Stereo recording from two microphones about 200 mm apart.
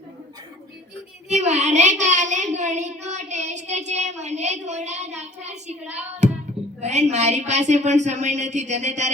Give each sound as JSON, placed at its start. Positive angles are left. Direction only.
{"t": 1.3, "sound": "child singing", "side_deg": -35}
{"t": 6.2, "sound": "a sound", "side_deg": -35}
{"t": 6.8, "sound": "child singing", "side_deg": -35}